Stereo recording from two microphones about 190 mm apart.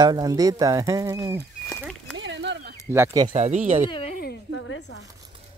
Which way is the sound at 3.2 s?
35° right (ahead or behind).